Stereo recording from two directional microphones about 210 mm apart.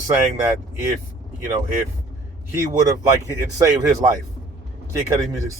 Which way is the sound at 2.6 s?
15° right (ahead or behind).